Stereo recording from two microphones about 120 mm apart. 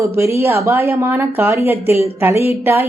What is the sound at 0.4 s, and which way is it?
Speech, 25° right (ahead or behind).